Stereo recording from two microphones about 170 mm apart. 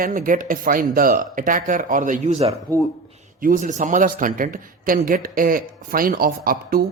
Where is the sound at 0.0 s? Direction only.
55° right (ahead or behind).